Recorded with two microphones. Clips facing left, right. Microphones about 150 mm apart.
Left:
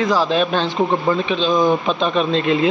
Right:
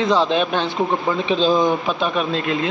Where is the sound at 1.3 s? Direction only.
35° right (ahead or behind).